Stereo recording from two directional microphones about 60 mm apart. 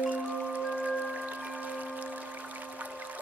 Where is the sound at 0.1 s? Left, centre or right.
Right.